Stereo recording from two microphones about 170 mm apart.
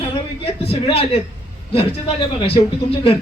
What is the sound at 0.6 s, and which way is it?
A man's voice, 35° left (ahead or behind).